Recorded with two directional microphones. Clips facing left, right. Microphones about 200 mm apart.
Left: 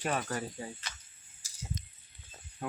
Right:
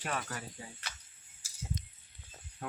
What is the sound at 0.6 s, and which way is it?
Speech, 40° left (ahead or behind).